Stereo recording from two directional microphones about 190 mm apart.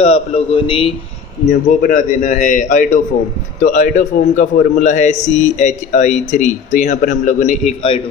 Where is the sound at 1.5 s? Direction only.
45° left (ahead or behind).